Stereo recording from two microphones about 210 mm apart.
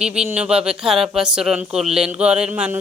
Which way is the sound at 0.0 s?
5° right (ahead or behind).